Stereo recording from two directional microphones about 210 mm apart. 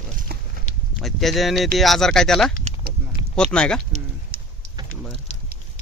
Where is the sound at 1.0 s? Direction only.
Centre (ahead or behind).